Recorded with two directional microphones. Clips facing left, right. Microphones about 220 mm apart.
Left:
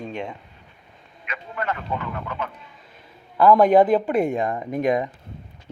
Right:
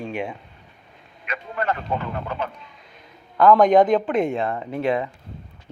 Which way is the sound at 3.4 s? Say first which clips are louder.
Even; 10° left (ahead or behind).